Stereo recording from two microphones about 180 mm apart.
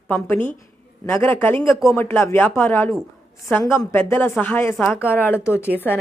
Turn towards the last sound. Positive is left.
turn(degrees=10)  # may be behind; listen again after turning